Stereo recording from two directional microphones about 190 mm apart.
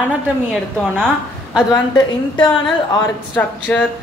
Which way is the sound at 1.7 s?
25° left (ahead or behind).